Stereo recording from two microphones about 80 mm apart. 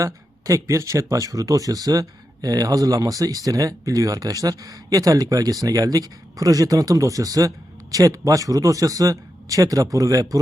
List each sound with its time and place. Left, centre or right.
0.0 s speech: right